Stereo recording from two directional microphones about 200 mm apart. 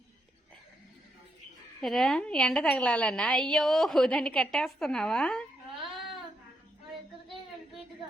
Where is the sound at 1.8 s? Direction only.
Centre (ahead or behind).